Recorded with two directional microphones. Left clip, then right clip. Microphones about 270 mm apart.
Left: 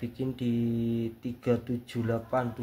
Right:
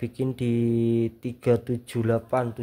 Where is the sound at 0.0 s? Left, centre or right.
Right.